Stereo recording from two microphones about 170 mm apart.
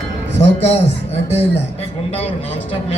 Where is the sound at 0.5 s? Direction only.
35° left (ahead or behind).